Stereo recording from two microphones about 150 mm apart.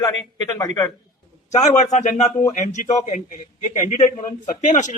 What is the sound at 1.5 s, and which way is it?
A man's voice, 50° left (ahead or behind).